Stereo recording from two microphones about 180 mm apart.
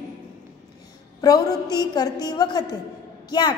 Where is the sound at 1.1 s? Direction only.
20° left (ahead or behind).